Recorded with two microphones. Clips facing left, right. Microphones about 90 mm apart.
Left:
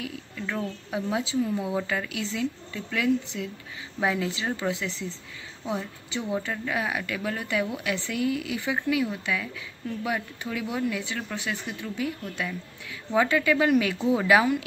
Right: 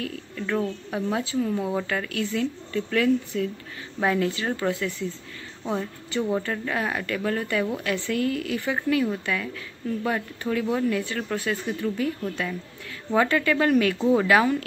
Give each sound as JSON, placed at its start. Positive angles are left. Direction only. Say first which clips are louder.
{"t": 0.4, "sound": "speech", "louder": "right 5 dB", "side_deg": 0}
{"t": 1.1, "sound": "a woman's voice", "louder": "even", "side_deg": 10}
{"t": 5.7, "sound": "a woman's voice", "louder": "right 3 dB", "side_deg": 5}